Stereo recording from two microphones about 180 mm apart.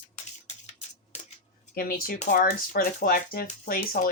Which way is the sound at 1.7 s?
55° left (ahead or behind).